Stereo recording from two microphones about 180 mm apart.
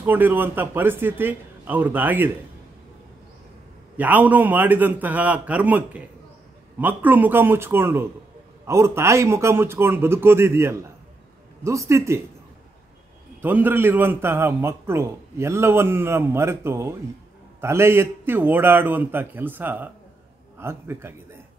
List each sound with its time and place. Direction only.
0.0 s a man's voice: 10° right (ahead or behind)
3.9 s a man's voice: 10° right (ahead or behind)
13.4 s a man's voice: 10° right (ahead or behind)